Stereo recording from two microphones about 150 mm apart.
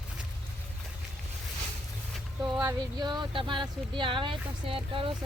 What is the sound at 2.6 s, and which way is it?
Speech, 30° right (ahead or behind).